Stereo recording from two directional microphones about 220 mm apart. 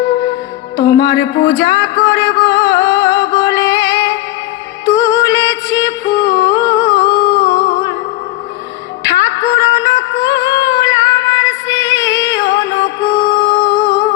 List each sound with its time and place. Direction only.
0.8 s music: 55° left (ahead or behind)
9.0 s music: 55° left (ahead or behind)